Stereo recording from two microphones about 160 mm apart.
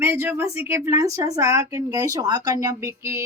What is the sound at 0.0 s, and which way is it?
Speech, 15° right (ahead or behind).